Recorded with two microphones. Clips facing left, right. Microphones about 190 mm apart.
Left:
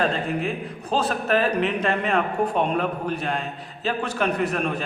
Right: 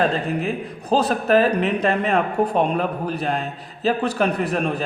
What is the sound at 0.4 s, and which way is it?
A man's voice, 35° right (ahead or behind).